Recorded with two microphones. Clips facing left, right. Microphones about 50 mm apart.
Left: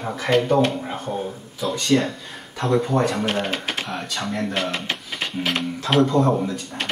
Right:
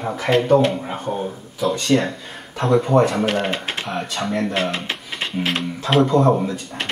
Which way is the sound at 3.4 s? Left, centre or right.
Right.